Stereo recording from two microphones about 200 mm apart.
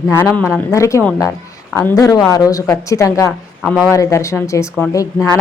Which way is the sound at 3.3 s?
5° left (ahead or behind).